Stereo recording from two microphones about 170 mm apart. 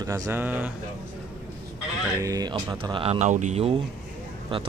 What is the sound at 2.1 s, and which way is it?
Speech, 20° right (ahead or behind).